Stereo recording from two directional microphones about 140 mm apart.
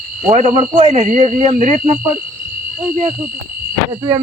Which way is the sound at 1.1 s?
60° right (ahead or behind).